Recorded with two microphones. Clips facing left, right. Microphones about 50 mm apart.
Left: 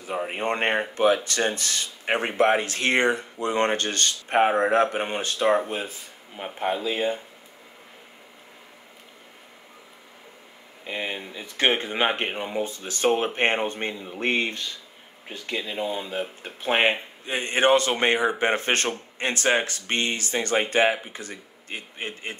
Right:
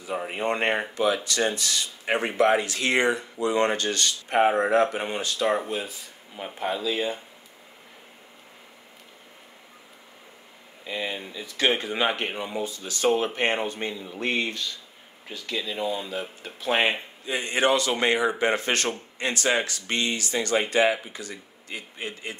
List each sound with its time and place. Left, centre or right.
0.3 s speech: left
10.8 s speech: left